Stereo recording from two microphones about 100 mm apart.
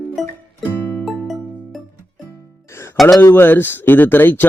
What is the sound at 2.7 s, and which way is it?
Music, 25° left (ahead or behind).